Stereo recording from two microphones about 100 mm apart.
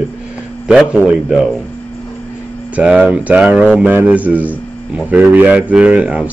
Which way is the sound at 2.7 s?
10° right (ahead or behind).